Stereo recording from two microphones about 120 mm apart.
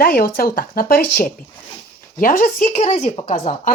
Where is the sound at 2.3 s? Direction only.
90° left; by 3.5 s 65° left (ahead or behind).